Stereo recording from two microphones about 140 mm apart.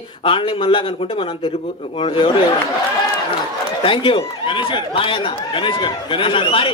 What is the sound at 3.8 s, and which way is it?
Speech, 40° left (ahead or behind).